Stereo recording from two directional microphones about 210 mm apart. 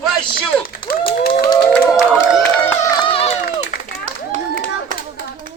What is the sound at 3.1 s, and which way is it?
Run, 30° left (ahead or behind).